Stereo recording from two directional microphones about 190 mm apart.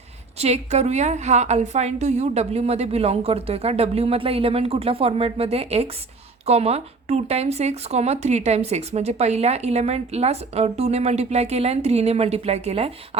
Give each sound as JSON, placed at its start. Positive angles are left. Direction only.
{"t": 0.3, "sound": "speech", "side_deg": -35}